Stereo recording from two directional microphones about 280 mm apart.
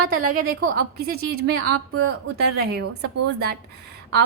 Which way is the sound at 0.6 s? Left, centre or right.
Right.